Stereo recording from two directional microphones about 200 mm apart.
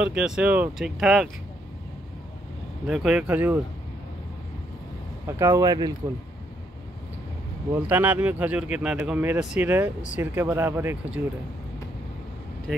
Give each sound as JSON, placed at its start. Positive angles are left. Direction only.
{"t": 0.0, "sound": "speech", "side_deg": -5}
{"t": 2.9, "sound": "speech", "side_deg": -5}
{"t": 5.2, "sound": "speech", "side_deg": -15}
{"t": 7.7, "sound": "speech", "side_deg": -10}